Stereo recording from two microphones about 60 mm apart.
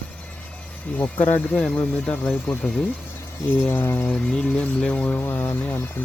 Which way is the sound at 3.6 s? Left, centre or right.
Left.